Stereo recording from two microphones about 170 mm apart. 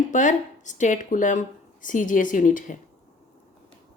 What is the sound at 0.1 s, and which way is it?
A woman's voice, 45° left (ahead or behind).